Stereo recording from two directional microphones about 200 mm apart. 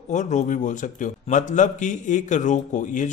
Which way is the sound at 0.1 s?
35° left (ahead or behind).